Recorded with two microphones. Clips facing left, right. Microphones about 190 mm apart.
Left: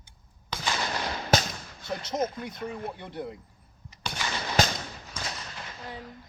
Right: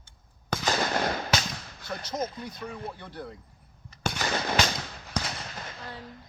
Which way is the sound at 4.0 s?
50° right (ahead or behind).